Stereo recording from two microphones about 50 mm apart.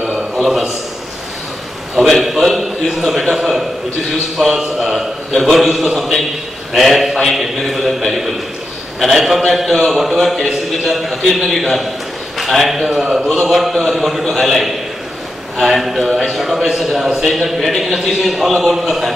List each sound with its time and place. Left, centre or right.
0.4 s a man's voice: centre
2.0 s a man's voice: centre
12.9 s a man's voice: centre